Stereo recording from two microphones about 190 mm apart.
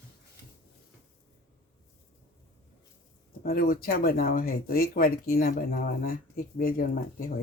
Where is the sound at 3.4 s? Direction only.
50° left (ahead or behind).